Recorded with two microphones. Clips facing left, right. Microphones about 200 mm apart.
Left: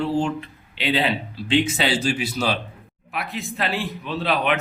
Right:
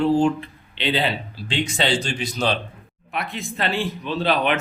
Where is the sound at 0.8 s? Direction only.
Centre (ahead or behind).